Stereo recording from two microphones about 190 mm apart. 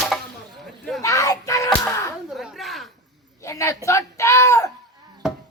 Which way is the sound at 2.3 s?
Centre (ahead or behind).